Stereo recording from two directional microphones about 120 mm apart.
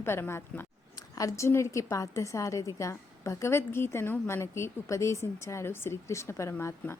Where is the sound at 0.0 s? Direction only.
20° left (ahead or behind).